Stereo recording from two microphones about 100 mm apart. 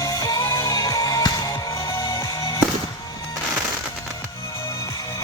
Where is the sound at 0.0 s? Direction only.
35° left (ahead or behind).